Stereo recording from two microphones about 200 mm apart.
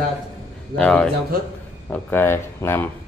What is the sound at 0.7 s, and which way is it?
Speech, 5° left (ahead or behind).